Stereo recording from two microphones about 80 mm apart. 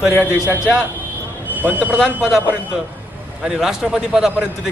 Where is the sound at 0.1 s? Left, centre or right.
Left.